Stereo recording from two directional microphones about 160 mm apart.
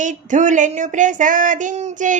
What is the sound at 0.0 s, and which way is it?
Female singing, 50° right (ahead or behind).